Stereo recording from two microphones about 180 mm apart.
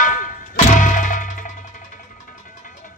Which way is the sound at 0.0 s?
45° left (ahead or behind).